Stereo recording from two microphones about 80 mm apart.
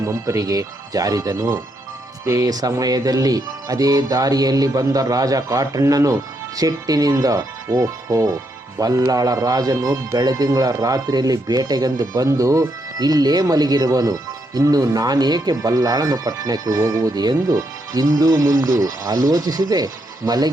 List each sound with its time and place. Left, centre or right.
0.0 s speech: right